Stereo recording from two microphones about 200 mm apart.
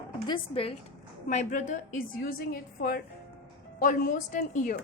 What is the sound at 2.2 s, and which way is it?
A woman's voice, 50° left (ahead or behind).